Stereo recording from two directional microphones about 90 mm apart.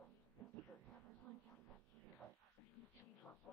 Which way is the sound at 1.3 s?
20° left (ahead or behind).